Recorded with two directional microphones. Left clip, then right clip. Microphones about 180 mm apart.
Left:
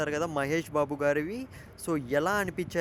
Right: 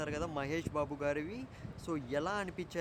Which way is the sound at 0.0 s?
30° left (ahead or behind).